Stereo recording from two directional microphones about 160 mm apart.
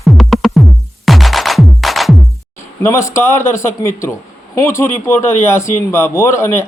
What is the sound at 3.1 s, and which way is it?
Speech, 15° left (ahead or behind).